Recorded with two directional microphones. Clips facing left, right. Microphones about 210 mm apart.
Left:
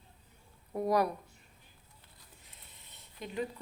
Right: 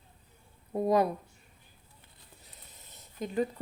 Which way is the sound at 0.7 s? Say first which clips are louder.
Right 3 dB; 25° right (ahead or behind).